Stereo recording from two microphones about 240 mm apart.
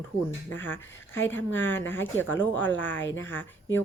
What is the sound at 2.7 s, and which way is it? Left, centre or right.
Speech, left.